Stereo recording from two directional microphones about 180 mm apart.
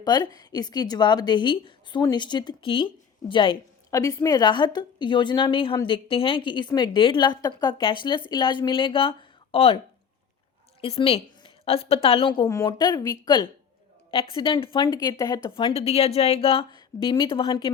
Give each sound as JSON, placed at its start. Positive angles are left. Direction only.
{"t": 0.0, "sound": "a woman's voice", "side_deg": 20}
{"t": 10.8, "sound": "a woman's voice", "side_deg": 35}